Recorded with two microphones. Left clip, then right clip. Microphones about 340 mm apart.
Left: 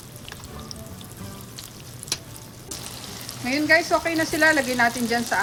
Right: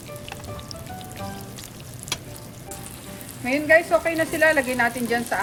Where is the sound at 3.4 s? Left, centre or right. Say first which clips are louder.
Right 2 dB; centre.